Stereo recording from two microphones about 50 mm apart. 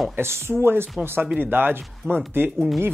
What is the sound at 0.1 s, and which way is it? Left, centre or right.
Speech, right.